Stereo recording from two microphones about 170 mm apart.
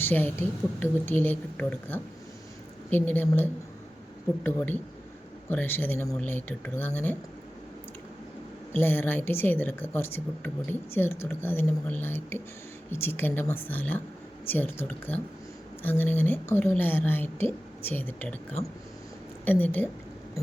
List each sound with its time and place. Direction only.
0.0 s a woman's voice: 10° left (ahead or behind)
8.7 s a woman's voice: 10° left (ahead or behind)
19.5 s a woman's voice: 10° left (ahead or behind)